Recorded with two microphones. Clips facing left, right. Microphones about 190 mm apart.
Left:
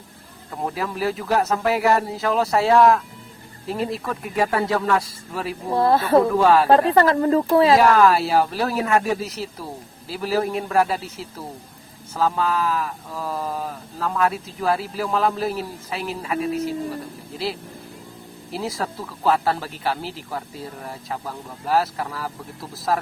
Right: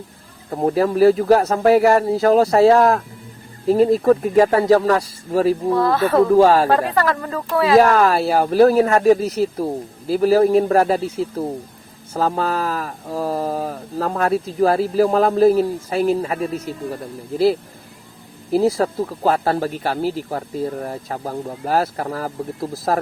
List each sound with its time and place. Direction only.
0.5 s speech: 40° right (ahead or behind)
5.7 s a woman's voice: 30° left (ahead or behind)
6.3 s speech: 35° right (ahead or behind)
6.7 s a woman's voice: 25° left (ahead or behind)
7.8 s speech: 40° right (ahead or behind)